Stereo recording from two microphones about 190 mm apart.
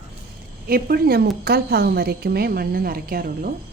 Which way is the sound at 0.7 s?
50° right (ahead or behind).